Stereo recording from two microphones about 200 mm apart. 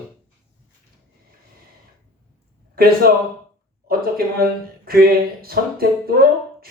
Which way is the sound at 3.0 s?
50° right (ahead or behind).